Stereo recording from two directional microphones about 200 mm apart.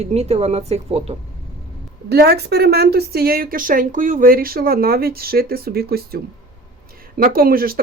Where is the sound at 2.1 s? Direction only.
50° right (ahead or behind).